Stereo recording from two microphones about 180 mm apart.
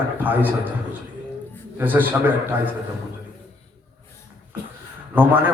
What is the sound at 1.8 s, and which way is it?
Speech, 10° right (ahead or behind).